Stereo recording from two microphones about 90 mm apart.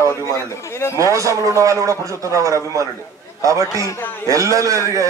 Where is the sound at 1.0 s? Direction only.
35° right (ahead or behind).